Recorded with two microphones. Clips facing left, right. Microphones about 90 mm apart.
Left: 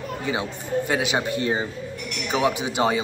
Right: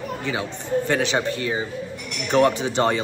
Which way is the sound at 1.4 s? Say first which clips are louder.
Left 1 dB; 30° left (ahead or behind).